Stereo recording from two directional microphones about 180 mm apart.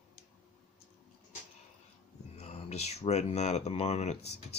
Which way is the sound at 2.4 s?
35° left (ahead or behind).